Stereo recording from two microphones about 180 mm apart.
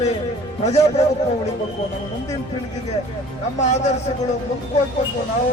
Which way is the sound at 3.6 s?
40° left (ahead or behind).